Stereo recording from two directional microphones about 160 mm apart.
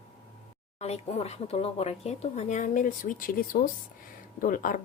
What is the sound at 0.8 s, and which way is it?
Speech, 40° left (ahead or behind).